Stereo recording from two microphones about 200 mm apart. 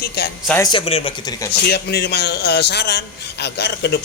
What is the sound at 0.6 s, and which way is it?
Speech, 25° left (ahead or behind).